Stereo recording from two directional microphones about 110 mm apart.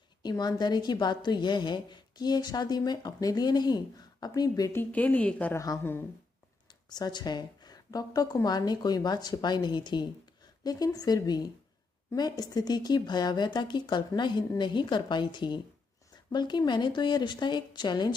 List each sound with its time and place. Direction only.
0.2 s a woman's voice: 40° left (ahead or behind)
4.7 s a woman's voice: 15° left (ahead or behind)
6.9 s a woman's voice: 40° left (ahead or behind)